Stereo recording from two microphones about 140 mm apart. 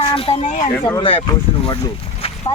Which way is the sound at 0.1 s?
40° left (ahead or behind).